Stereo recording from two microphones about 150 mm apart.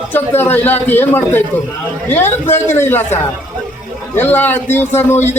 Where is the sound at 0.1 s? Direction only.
15° left (ahead or behind).